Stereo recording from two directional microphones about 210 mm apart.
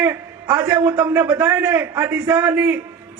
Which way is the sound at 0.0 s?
10° right (ahead or behind).